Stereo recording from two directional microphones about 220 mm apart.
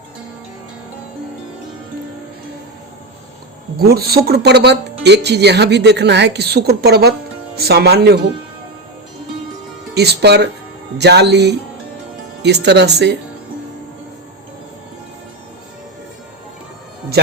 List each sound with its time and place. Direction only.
3.8 s speech: 45° right (ahead or behind)
9.9 s speech: 50° right (ahead or behind)